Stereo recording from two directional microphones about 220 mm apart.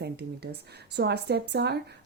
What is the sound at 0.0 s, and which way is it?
Speech, 50° right (ahead or behind).